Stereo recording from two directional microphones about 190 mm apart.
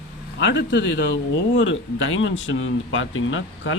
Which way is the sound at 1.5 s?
85° left.